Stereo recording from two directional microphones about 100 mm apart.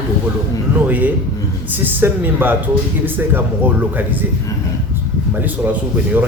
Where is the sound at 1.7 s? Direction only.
20° right (ahead or behind).